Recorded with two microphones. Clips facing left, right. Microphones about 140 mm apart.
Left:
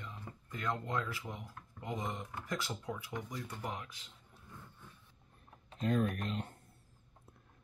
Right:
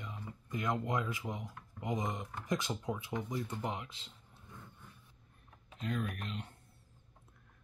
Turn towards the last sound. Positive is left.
turn(degrees=40)  # may be behind; listen again after turning